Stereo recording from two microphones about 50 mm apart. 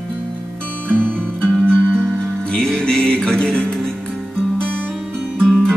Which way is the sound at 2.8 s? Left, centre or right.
Centre.